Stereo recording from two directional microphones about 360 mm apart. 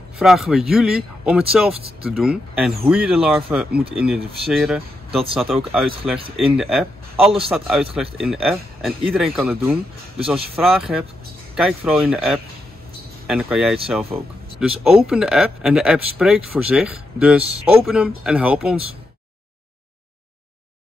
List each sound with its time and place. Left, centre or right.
0.2 s speech: centre
7.2 s a man's voice: centre
7.5 s speech: centre